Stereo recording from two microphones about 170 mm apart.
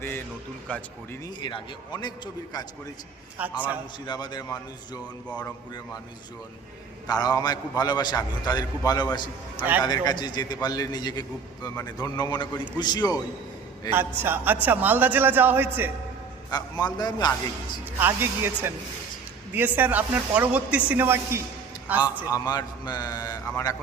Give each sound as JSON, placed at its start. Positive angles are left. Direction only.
{"t": 0.7, "sound": "speech", "side_deg": 10}
{"t": 1.4, "sound": "a man's voice", "side_deg": 25}
{"t": 3.3, "sound": "speech", "side_deg": -10}
{"t": 4.0, "sound": "a man's voice", "side_deg": 25}
{"t": 7.1, "sound": "a man's voice", "side_deg": 20}
{"t": 14.2, "sound": "speech", "side_deg": -10}
{"t": 16.5, "sound": "a man's voice", "side_deg": 25}
{"t": 18.0, "sound": "speech", "side_deg": -10}
{"t": 22.3, "sound": "a man's voice", "side_deg": 25}